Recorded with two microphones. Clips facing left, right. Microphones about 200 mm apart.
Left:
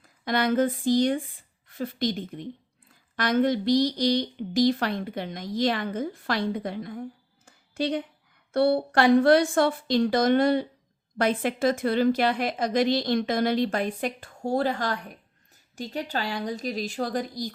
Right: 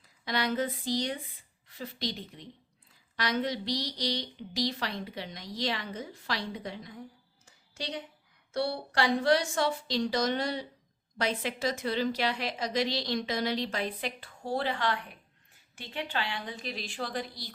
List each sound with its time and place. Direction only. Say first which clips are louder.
0.0 s a woman's voice: left 6 dB; 50° left (ahead or behind)